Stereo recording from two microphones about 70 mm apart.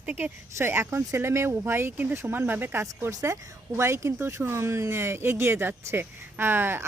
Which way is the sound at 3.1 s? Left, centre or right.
Right.